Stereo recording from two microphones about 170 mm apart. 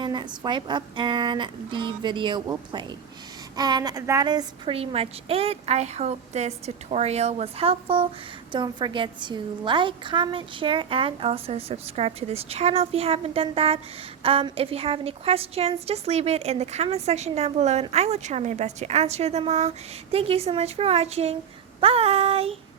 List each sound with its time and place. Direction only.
0.0 s a woman's voice: 25° right (ahead or behind)